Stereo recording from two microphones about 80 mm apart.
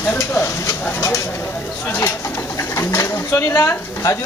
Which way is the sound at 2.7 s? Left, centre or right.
Left.